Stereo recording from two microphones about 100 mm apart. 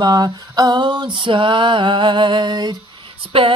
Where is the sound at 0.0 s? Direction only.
40° right (ahead or behind).